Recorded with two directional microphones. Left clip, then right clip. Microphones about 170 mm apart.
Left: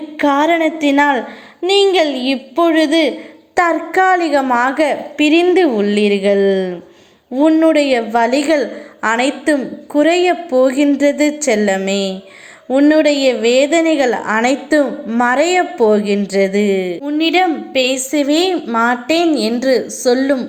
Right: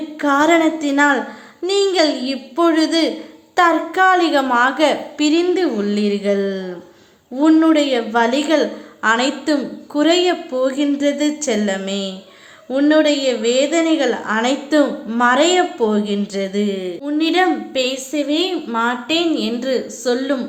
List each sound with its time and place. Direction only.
0.2 s a woman's voice: 25° left (ahead or behind)
1.6 s a child's voice: 20° right (ahead or behind)
2.3 s a woman's voice: 20° left (ahead or behind)
5.9 s a child's voice: 20° right (ahead or behind)
6.2 s a woman's voice: 25° left (ahead or behind)
17.1 s a woman's voice: 20° left (ahead or behind)
17.9 s a woman's voice: 55° left (ahead or behind)
18.5 s a woman's voice: 40° left (ahead or behind)